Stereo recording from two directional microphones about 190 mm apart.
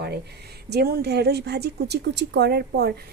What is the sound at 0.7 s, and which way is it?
A woman's voice, 55° right (ahead or behind).